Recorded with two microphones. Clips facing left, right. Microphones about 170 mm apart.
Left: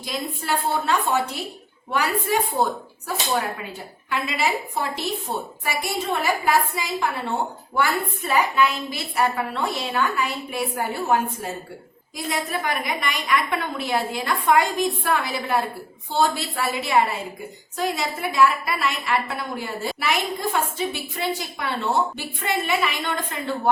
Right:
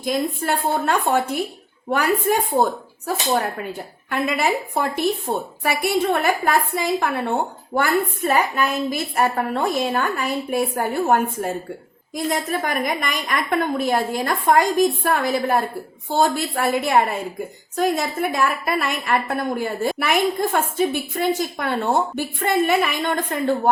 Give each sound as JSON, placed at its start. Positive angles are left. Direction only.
{"t": 0.0, "sound": "a woman's voice", "side_deg": -50}
{"t": 4.1, "sound": "a woman's voice", "side_deg": -50}